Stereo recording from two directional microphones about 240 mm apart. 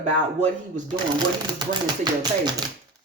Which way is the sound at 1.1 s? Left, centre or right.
Centre.